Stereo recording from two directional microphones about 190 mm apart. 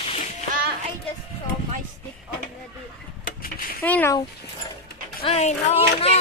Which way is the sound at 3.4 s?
50° left (ahead or behind).